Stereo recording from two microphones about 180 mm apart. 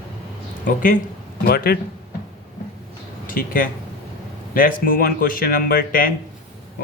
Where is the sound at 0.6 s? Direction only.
50° left (ahead or behind).